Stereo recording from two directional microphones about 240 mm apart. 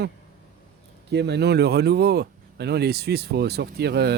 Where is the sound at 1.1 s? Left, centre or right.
Right.